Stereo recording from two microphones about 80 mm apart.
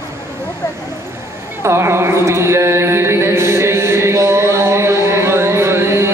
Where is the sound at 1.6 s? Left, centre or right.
Right.